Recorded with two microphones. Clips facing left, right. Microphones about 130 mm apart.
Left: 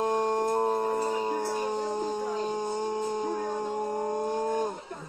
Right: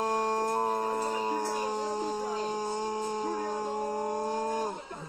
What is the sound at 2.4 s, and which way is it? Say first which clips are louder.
Howl: left 2 dB; 20° left (ahead or behind).